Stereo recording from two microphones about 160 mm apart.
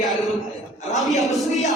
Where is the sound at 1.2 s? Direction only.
Centre (ahead or behind).